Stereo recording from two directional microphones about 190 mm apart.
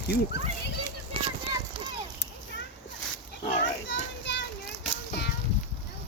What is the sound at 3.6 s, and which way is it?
Children playing, 70° left (ahead or behind).